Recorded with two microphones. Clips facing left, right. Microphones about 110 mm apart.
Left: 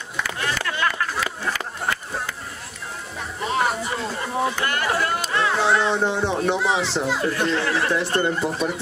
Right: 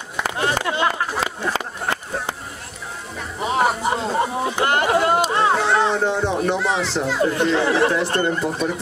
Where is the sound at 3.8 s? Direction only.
30° right (ahead or behind).